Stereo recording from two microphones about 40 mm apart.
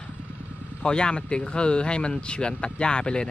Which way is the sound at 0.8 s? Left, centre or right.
Left.